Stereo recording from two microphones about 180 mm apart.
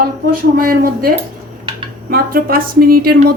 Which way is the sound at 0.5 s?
55° right (ahead or behind).